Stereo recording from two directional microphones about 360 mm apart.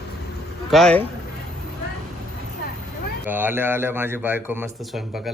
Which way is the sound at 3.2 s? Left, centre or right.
Centre.